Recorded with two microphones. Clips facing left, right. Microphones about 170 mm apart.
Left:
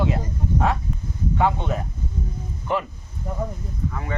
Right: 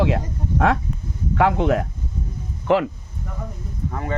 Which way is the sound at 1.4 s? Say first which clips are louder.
Right 5 dB; 90° right.